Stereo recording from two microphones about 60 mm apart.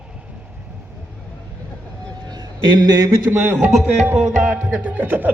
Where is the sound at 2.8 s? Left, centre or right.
Right.